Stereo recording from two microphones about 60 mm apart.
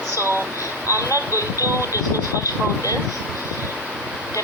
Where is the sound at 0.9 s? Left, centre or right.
Left.